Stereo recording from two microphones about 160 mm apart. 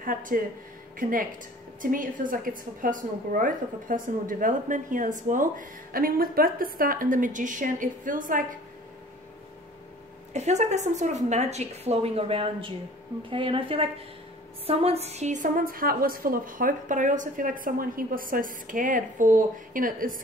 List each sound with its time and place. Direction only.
0.0 s a woman's voice: 60° right (ahead or behind)
1.8 s a woman's voice: 60° right (ahead or behind)
10.3 s a woman's voice: 45° right (ahead or behind)